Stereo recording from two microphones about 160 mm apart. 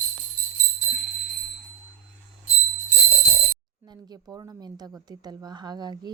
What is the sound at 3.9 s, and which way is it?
A woman's voice, 25° right (ahead or behind).